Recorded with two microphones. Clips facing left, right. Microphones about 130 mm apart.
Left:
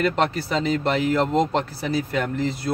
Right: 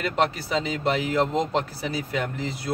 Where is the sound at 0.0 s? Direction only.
5° right (ahead or behind).